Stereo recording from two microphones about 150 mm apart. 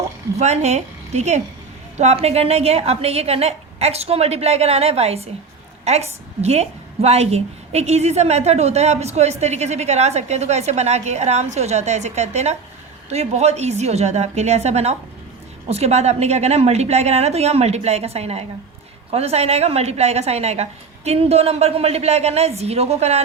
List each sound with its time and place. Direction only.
0.3 s a woman's voice: 45° right (ahead or behind)